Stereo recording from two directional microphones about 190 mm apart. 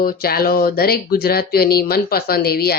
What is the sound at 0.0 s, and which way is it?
Speech, 50° left (ahead or behind).